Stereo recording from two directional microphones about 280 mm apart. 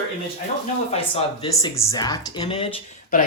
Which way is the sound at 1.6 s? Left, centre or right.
Centre.